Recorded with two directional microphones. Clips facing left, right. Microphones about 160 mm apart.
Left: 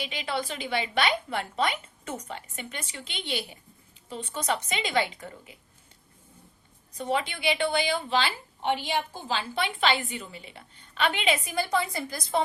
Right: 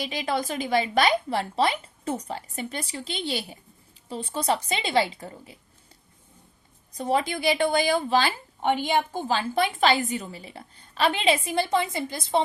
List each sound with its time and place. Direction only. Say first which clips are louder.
0.0 s a woman's voice: right 4 dB; 40° right (ahead or behind)
6.9 s a woman's voice: right 4 dB; 35° right (ahead or behind)